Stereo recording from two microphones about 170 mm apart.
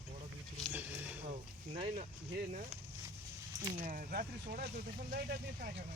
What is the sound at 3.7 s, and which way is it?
Speech, 50° right (ahead or behind).